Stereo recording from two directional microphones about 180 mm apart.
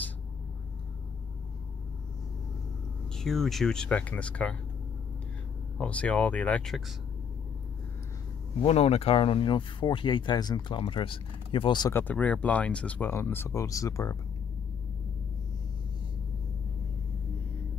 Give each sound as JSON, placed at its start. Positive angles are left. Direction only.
{"t": 3.2, "sound": "speech", "side_deg": 0}
{"t": 5.8, "sound": "speech", "side_deg": 5}
{"t": 8.6, "sound": "speech", "side_deg": 35}
{"t": 11.9, "sound": "speech", "side_deg": 10}